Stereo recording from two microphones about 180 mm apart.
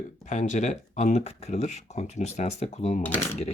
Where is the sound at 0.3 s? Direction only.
40° left (ahead or behind).